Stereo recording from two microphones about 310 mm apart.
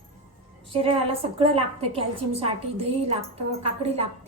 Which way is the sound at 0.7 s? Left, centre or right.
Centre.